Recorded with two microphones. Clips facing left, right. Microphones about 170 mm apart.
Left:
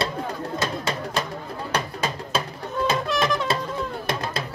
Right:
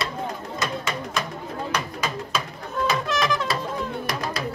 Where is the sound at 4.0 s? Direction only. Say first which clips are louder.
Left 1 dB; 25° left (ahead or behind).